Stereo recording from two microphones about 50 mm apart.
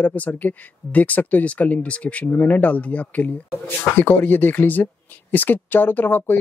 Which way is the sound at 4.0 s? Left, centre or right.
Left.